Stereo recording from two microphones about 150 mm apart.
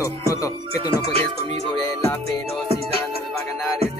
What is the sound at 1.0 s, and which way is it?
Music, 40° right (ahead or behind).